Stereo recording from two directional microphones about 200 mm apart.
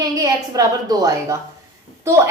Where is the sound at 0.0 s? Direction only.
20° right (ahead or behind).